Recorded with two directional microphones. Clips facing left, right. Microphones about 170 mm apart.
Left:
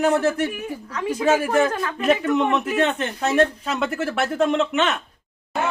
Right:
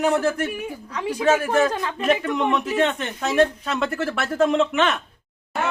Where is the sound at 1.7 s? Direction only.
20° right (ahead or behind).